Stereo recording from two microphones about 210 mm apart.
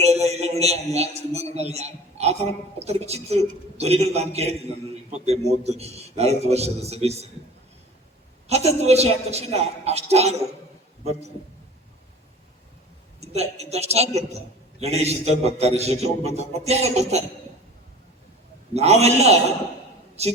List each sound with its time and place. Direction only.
0.0 s a man's voice: 30° right (ahead or behind)
8.4 s a man's voice: 30° right (ahead or behind)
13.1 s a man's voice: 30° right (ahead or behind)
18.7 s a man's voice: 30° right (ahead or behind)